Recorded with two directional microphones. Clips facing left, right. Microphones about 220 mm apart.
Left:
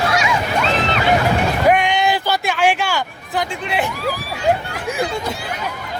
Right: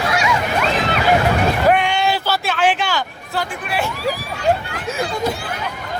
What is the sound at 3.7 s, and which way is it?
Speech, 20° left (ahead or behind).